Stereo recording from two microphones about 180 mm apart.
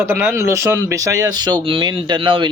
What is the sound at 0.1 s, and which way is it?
Speech, 15° right (ahead or behind).